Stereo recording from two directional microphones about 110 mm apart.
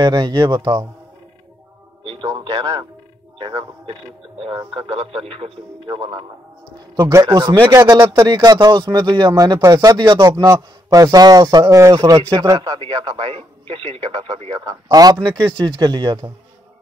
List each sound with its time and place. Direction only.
0.0 s speech: 40° right (ahead or behind)
2.0 s speech: 45° right (ahead or behind)
4.7 s speech: 60° right (ahead or behind)
5.9 s speech: 40° right (ahead or behind)
7.0 s a man's voice: 30° right (ahead or behind)
7.2 s a man's voice: 45° right (ahead or behind)
7.7 s a man's voice: 30° right (ahead or behind); by 14.6 s 55° right (ahead or behind)
14.6 s speech: 35° right (ahead or behind)